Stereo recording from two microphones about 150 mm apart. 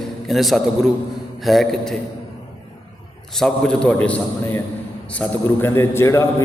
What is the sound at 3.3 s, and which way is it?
A man's voice, 5° left (ahead or behind).